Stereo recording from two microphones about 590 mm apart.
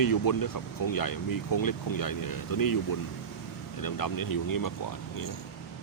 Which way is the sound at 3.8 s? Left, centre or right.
Left.